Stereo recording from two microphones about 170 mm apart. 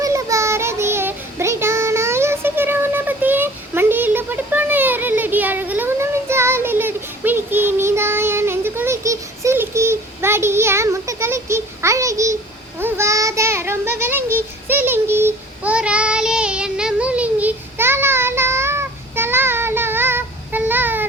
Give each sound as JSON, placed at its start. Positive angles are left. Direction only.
{"t": 0.0, "sound": "child singing", "side_deg": -20}